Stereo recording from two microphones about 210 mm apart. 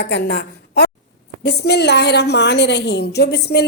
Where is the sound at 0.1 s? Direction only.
50° left (ahead or behind).